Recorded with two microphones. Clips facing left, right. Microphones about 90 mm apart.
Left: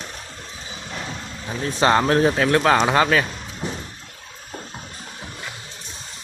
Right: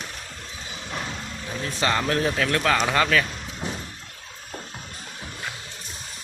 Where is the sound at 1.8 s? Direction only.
30° left (ahead or behind).